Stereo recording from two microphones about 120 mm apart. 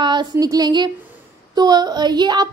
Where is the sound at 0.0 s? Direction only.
35° right (ahead or behind).